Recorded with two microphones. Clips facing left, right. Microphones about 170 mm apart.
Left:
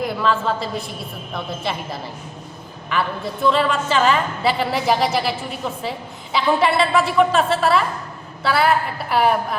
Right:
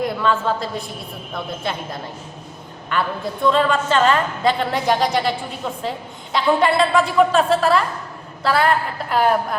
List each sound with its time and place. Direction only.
0.0 s a woman's voice: centre (ahead or behind)